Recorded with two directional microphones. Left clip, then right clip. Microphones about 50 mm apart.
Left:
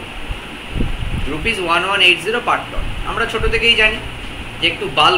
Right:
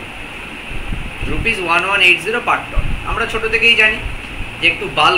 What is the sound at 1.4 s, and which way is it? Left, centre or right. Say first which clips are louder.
A man's voice: right 1 dB; centre.